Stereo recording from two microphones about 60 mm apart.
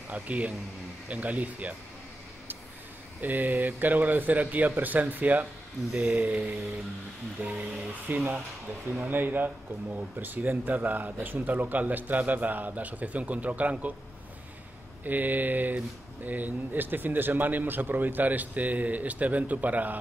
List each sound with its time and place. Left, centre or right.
0.1 s speech: right
3.2 s speech: right
15.0 s speech: right